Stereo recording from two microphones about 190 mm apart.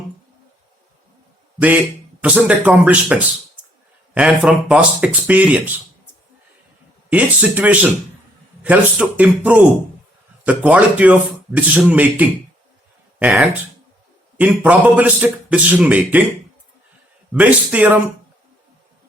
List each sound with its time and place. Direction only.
2.2 s speech: 10° right (ahead or behind)
7.1 s speech: 10° right (ahead or behind)
17.3 s speech: 5° right (ahead or behind)